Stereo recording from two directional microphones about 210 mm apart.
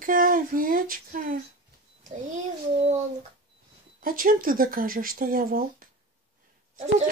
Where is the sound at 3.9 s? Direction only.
40° right (ahead or behind).